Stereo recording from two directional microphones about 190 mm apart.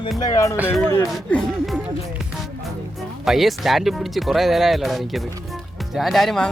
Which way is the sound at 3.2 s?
Centre (ahead or behind).